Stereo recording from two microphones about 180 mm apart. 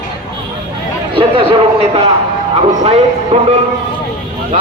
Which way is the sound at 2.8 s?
35° right (ahead or behind).